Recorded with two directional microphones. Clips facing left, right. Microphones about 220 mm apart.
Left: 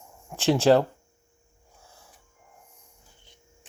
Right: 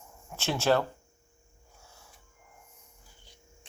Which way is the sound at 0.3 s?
30° left (ahead or behind).